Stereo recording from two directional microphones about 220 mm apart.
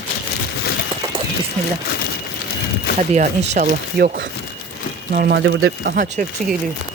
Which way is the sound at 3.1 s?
35° right (ahead or behind).